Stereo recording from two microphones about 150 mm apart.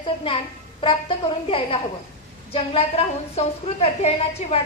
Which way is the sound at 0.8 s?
35° left (ahead or behind).